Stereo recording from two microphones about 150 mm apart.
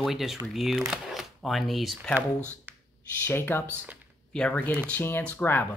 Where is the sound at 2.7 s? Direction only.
10° right (ahead or behind).